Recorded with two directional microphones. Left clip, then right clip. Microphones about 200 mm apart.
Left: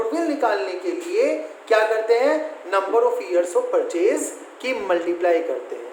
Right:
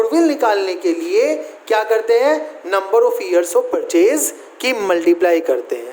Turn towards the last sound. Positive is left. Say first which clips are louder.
# right 5 dB
turn(degrees=-60)  # may be behind; listen again after turning